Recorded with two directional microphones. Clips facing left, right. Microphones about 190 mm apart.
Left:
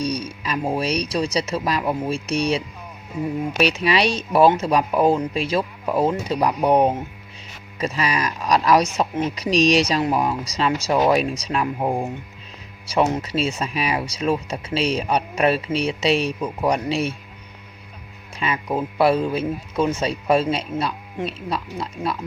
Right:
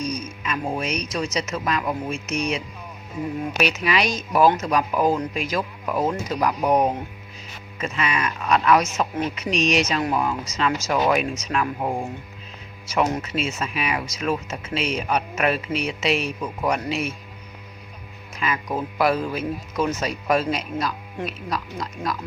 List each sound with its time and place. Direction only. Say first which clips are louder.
0.0 s speech: left 3 dB; 30° left (ahead or behind)
18.3 s speech: left 2 dB; 30° left (ahead or behind)